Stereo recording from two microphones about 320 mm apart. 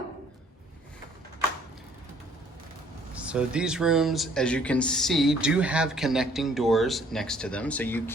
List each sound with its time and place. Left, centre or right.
3.2 s speech: centre